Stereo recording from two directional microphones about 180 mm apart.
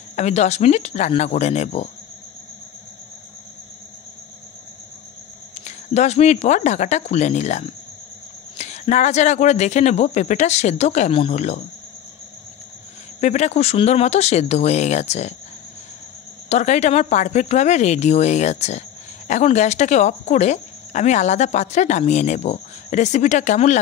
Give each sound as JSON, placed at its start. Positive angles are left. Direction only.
{"t": 0.1, "sound": "speech", "side_deg": 40}
{"t": 5.5, "sound": "speech", "side_deg": 40}
{"t": 13.2, "sound": "speech", "side_deg": 40}
{"t": 16.4, "sound": "speech", "side_deg": 40}